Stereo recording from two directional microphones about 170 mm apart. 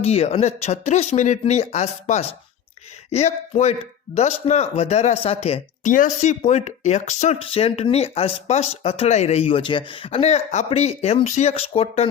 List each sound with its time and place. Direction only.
0.0 s speech: 40° left (ahead or behind)